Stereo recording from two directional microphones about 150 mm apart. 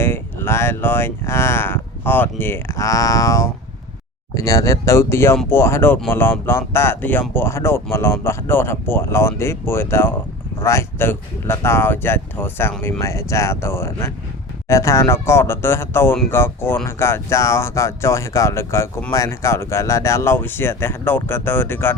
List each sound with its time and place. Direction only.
0.0 s speech: 15° left (ahead or behind)